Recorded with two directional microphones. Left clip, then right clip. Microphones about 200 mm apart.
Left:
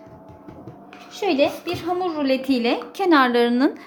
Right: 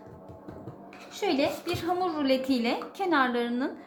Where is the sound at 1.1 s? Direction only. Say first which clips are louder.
Left 7 dB; 25° left (ahead or behind).